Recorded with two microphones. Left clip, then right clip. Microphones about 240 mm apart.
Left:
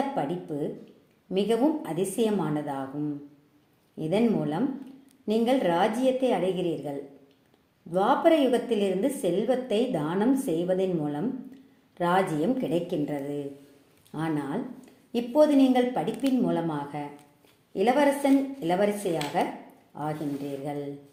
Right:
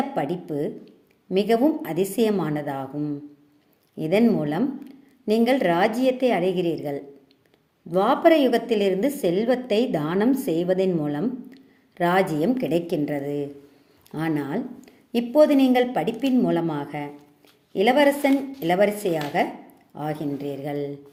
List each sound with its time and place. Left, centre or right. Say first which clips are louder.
0.2 s a woman's voice: right 4 dB; right
3.9 s a woman's voice: right 5 dB; right